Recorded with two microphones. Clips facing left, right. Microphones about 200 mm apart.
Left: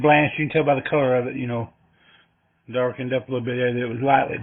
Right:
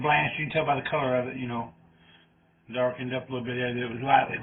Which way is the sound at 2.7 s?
65° left (ahead or behind).